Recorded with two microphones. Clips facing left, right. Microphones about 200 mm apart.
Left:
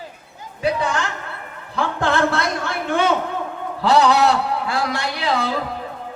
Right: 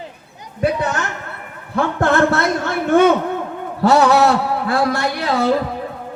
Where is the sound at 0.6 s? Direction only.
55° right (ahead or behind).